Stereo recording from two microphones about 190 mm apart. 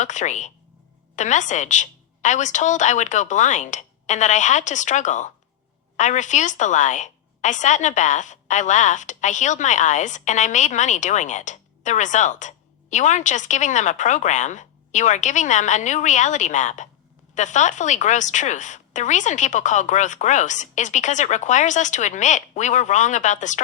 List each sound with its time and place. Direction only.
0.0 s a woman's voice: 40° left (ahead or behind)